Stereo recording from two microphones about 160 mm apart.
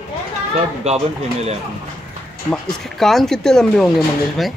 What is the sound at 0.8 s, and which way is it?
Speech, 40° right (ahead or behind).